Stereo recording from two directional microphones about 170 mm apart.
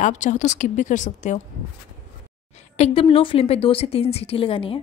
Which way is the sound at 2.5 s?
40° left (ahead or behind).